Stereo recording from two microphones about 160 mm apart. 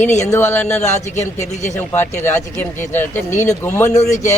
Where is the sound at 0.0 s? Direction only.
45° left (ahead or behind).